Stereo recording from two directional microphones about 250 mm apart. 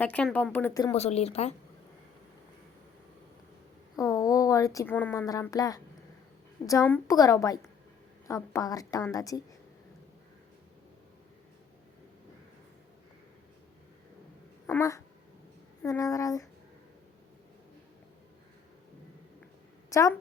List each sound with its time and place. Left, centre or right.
0.0 s a woman's voice: centre
0.9 s speech: left
3.9 s a woman's voice: centre
14.7 s a woman's voice: centre
19.9 s a woman's voice: centre